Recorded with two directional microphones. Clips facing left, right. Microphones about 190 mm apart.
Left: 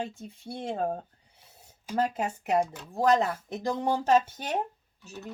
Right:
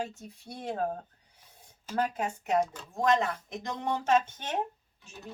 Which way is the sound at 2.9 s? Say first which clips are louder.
Left 3 dB; 35° left (ahead or behind).